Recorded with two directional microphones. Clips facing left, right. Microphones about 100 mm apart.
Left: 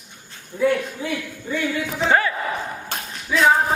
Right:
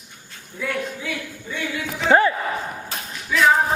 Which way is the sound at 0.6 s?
35° left (ahead or behind).